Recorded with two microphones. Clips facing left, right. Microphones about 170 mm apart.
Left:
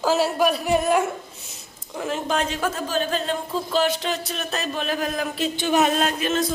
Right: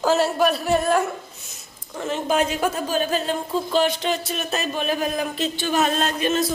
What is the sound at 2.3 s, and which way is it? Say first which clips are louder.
Speech: right 5 dB; 10° right (ahead or behind).